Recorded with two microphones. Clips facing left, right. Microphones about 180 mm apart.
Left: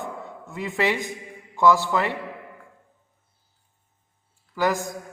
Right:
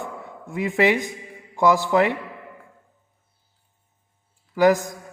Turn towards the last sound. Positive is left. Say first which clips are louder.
# right 7 dB
turn(degrees=-15)  # may be behind; listen again after turning